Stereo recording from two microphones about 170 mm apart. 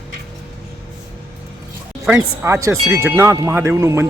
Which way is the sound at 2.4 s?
15° right (ahead or behind).